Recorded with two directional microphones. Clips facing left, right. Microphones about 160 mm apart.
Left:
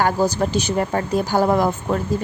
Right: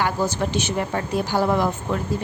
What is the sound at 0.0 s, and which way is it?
Speech, 40° left (ahead or behind).